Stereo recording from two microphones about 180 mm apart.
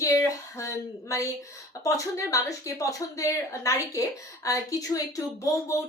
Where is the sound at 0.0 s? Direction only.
20° left (ahead or behind).